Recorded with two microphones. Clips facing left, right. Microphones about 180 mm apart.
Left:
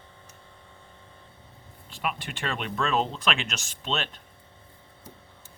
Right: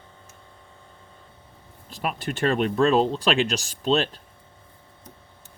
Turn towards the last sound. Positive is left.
turn(degrees=-35)  # may be behind; listen again after turning